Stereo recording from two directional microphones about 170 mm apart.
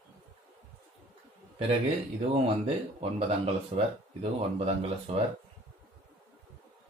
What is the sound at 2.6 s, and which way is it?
Speech, 35° right (ahead or behind).